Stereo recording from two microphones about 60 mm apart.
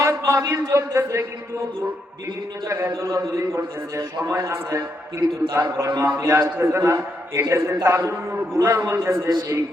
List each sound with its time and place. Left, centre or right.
0.3 s a man's voice: right
2.6 s a man's voice: right
5.5 s a man's voice: right